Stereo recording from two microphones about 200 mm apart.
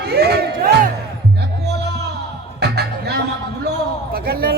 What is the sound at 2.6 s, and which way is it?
Music, 55° right (ahead or behind).